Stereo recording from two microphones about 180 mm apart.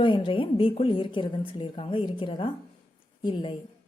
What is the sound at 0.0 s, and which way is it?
A woman's voice, 30° left (ahead or behind).